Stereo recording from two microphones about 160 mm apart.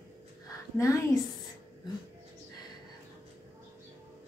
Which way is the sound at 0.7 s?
20° left (ahead or behind).